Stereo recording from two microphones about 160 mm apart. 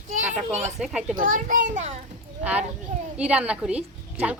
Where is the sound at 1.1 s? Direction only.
60° right (ahead or behind).